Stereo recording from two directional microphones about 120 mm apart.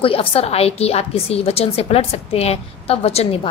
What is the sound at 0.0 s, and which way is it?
A woman's voice, 50° left (ahead or behind).